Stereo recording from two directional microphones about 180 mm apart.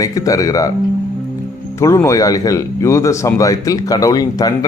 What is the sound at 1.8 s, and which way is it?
Speech, 15° left (ahead or behind).